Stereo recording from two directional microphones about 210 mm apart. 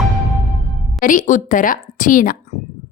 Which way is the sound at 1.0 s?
40° left (ahead or behind).